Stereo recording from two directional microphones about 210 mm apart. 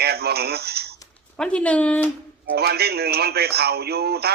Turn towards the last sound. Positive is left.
turn(degrees=-50)  # may be behind; listen again after turning